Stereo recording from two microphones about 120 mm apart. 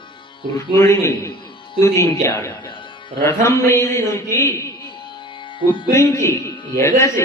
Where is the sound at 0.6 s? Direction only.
25° left (ahead or behind).